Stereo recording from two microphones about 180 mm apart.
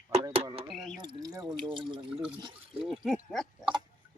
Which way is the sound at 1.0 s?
20° right (ahead or behind).